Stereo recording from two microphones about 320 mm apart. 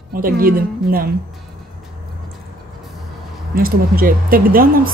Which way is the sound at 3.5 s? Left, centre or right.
Right.